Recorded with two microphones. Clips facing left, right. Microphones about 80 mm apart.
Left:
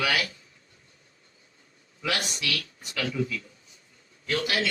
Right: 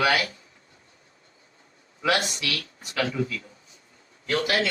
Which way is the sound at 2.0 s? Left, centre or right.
Right.